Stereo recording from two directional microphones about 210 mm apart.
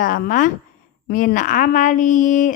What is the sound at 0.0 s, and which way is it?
Speech, 40° left (ahead or behind).